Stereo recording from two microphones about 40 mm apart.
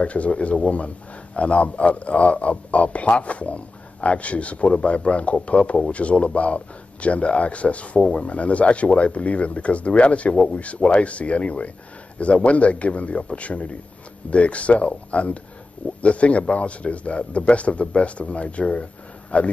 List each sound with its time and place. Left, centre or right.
0.0 s a man's voice: left